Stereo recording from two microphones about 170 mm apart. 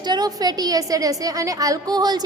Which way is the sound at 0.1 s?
25° right (ahead or behind).